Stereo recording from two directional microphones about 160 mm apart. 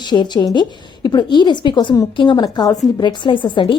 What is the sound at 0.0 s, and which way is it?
A woman's voice, 25° left (ahead or behind).